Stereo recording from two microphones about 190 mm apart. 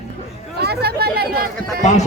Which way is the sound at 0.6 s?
60° right (ahead or behind).